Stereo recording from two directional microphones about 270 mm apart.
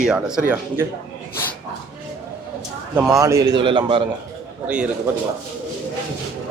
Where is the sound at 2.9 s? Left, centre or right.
Centre.